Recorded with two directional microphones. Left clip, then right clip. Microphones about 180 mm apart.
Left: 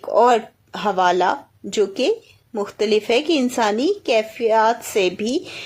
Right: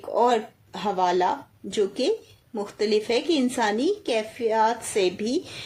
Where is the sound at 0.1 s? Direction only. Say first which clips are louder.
Left 7 dB; 25° left (ahead or behind).